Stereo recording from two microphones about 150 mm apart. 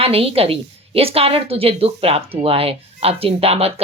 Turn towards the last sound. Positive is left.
turn(degrees=-40)  # may be behind; listen again after turning